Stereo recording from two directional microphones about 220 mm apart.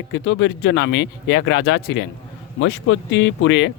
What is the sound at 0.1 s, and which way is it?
Speech, 55° left (ahead or behind).